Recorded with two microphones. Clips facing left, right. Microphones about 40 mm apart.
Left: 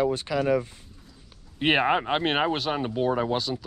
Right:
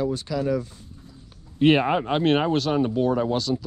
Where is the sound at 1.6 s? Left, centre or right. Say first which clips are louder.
Right 3 dB; centre.